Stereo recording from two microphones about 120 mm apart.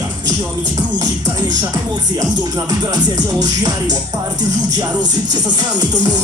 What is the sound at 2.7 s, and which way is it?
Music, 35° right (ahead or behind).